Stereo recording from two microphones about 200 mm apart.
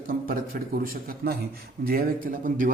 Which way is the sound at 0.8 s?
50° right (ahead or behind).